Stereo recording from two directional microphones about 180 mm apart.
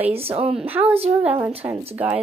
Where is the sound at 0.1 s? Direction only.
35° right (ahead or behind).